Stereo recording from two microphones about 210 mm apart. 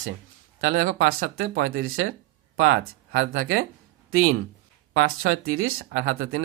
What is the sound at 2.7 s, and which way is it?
Speech, 45° right (ahead or behind).